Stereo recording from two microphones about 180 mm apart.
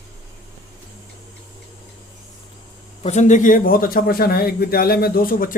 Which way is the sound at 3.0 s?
40° left (ahead or behind).